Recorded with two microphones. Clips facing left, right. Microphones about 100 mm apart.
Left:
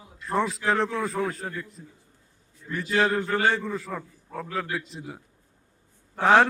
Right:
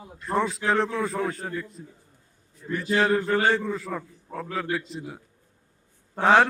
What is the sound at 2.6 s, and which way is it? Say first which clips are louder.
Speech: right 4 dB; 40° right (ahead or behind).